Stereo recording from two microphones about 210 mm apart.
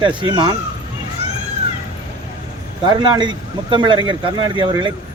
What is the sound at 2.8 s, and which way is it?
Speech, 20° right (ahead or behind).